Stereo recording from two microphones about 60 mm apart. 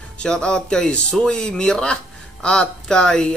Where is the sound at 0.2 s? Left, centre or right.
Centre.